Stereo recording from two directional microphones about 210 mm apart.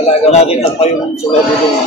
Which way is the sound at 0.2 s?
30° left (ahead or behind).